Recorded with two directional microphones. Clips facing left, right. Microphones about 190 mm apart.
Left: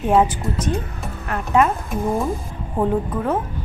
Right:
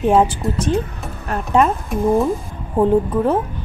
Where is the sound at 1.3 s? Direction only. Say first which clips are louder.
Right 2 dB; 30° right (ahead or behind).